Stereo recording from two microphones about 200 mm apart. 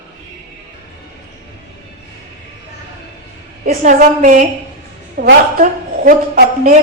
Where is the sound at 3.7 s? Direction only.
40° right (ahead or behind).